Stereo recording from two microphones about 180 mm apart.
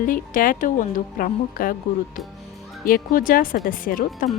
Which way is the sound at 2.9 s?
50° left (ahead or behind).